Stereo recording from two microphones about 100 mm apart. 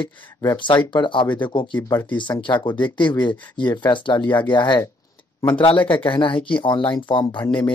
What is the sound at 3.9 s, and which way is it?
Speech, 50° left (ahead or behind).